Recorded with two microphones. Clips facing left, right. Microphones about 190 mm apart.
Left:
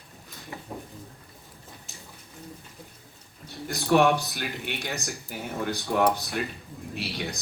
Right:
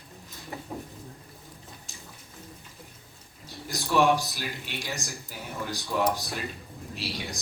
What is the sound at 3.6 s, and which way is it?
Speech, 60° left (ahead or behind).